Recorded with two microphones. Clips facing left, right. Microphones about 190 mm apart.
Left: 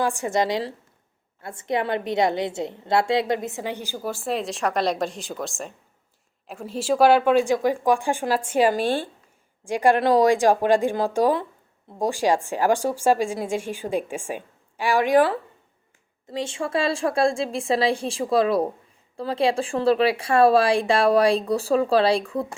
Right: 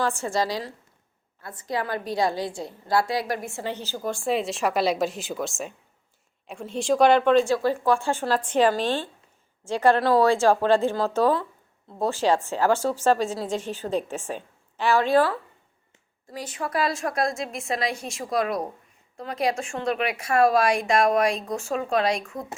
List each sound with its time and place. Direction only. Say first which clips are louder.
0.0 s a woman's voice: left 2 dB; 15° left (ahead or behind); by 22.4 s 35° left (ahead or behind)